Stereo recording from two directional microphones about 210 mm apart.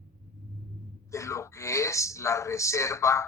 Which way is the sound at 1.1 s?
15° left (ahead or behind).